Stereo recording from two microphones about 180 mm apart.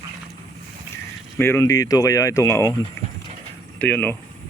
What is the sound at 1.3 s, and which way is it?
Speech, 15° left (ahead or behind).